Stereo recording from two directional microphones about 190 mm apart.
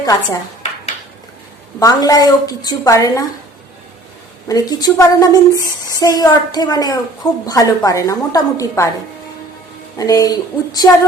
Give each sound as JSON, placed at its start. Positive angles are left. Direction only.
{"t": 0.0, "sound": "a woman's voice", "side_deg": 20}
{"t": 1.8, "sound": "a woman's voice", "side_deg": 20}
{"t": 4.4, "sound": "a woman's voice", "side_deg": 20}
{"t": 10.0, "sound": "a woman's voice", "side_deg": 20}